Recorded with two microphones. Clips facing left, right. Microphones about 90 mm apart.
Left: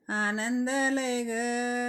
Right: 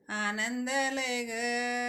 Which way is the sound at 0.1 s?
35° left (ahead or behind).